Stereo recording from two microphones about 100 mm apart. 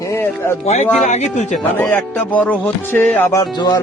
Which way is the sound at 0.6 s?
90° left.